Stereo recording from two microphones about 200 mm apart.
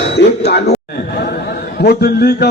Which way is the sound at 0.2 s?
55° left (ahead or behind).